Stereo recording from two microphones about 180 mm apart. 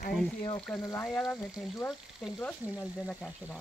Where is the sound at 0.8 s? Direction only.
20° left (ahead or behind).